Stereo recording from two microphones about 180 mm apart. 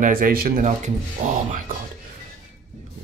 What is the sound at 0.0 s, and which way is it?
Speech, 50° right (ahead or behind).